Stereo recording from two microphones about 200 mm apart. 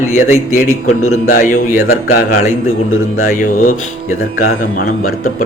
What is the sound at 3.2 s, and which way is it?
Speech, 40° left (ahead or behind).